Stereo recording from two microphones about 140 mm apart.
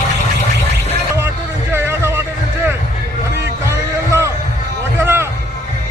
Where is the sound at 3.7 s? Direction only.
20° right (ahead or behind).